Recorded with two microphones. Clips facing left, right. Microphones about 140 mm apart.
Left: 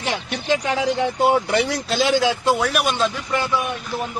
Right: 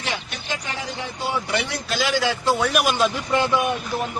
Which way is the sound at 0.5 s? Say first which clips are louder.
Left 10 dB; 90° left.